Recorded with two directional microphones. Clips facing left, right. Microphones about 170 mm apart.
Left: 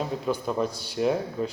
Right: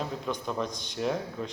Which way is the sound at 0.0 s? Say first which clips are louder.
Left 5 dB; 5° left (ahead or behind).